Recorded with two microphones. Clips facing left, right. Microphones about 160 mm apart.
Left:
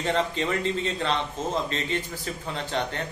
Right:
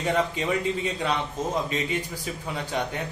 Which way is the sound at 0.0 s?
10° right (ahead or behind).